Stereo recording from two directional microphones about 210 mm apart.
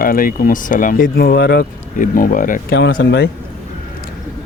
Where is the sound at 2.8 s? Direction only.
55° left (ahead or behind).